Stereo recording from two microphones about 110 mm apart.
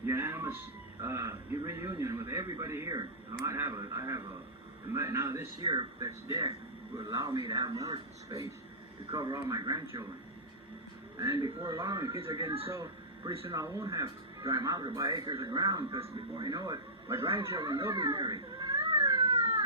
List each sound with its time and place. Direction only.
0.0 s a sound: 20° right (ahead or behind)
1.0 s a man's voice: 25° right (ahead or behind)
5.6 s speech: 45° right (ahead or behind)
6.1 s a man's voice: 30° right (ahead or behind)
11.2 s speech: 30° right (ahead or behind)
12.2 s a man's voice: 25° right (ahead or behind)
12.7 s a sound: 35° right (ahead or behind)
13.5 s speech: 30° right (ahead or behind)
17.1 s a man's voice: 25° right (ahead or behind)
17.9 s a sound: 40° right (ahead or behind)